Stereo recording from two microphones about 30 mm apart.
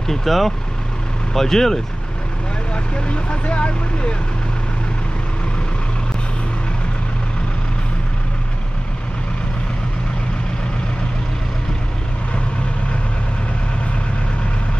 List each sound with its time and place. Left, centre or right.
0.1 s speech: centre
2.7 s speech: left